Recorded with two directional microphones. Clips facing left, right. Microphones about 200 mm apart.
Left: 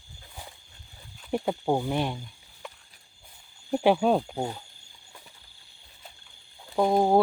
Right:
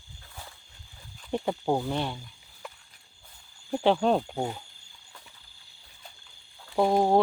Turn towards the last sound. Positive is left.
turn(degrees=0)  # may be behind; listen again after turning